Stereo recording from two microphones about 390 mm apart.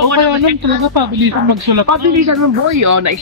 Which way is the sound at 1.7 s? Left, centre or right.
Right.